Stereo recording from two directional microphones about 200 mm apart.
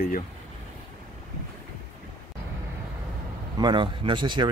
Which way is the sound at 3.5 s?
25° right (ahead or behind).